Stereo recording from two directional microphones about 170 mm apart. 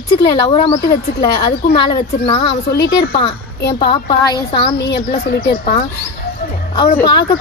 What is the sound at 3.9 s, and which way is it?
Speech, 25° left (ahead or behind).